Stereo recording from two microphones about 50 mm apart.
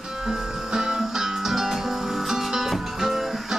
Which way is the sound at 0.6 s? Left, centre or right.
Centre.